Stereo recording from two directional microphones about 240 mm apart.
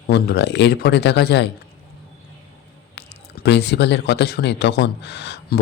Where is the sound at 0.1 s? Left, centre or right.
Left.